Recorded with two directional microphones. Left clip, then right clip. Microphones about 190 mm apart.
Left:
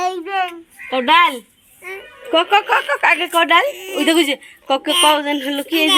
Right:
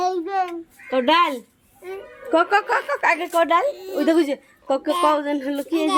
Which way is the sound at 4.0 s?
10° left (ahead or behind).